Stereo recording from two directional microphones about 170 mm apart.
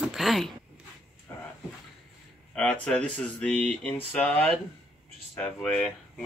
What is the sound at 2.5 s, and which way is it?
Speech, 5° left (ahead or behind).